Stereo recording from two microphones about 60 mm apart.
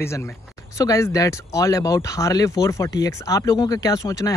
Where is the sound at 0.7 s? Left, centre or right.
Left.